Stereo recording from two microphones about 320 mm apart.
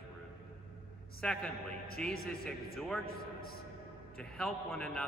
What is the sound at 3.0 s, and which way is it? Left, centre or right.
Speech, left.